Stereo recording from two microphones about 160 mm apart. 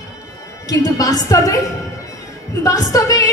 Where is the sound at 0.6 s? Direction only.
25° left (ahead or behind).